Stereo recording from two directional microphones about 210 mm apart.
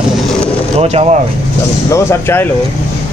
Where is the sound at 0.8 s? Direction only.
30° right (ahead or behind).